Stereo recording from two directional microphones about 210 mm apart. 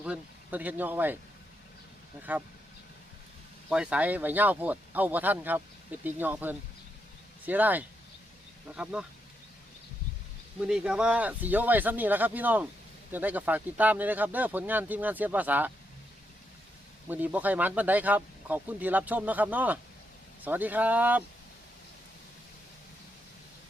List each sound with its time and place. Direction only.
0.0 s speech: 5° right (ahead or behind)
2.3 s speech: 10° right (ahead or behind)
3.7 s speech: 5° right (ahead or behind)
10.6 s speech: 5° right (ahead or behind)
17.1 s speech: 10° right (ahead or behind)